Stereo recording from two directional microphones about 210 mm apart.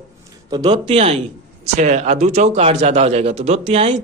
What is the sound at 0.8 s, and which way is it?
Speech, 30° right (ahead or behind).